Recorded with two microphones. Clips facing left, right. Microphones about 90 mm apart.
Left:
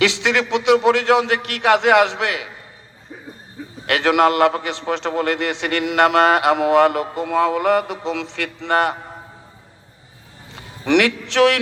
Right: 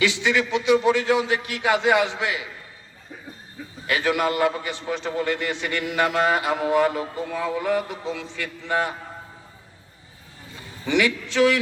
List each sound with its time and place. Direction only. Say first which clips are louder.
0.0 s a man's voice: left 3 dB; 90° left
3.8 s a man's voice: left 7 dB; 90° left
10.5 s a man's voice: left 6 dB; 90° left